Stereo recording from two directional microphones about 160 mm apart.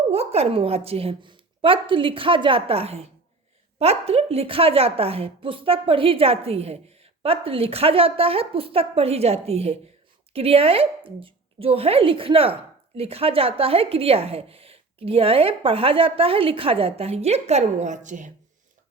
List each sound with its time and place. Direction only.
0.1 s a woman's voice: 40° right (ahead or behind)